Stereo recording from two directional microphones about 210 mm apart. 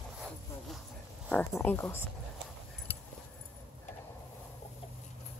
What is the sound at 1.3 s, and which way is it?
Speech, 10° left (ahead or behind).